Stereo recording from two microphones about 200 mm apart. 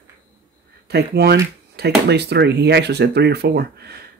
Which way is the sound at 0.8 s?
55° right (ahead or behind).